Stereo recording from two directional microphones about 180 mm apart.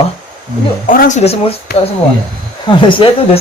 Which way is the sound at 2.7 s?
30° left (ahead or behind).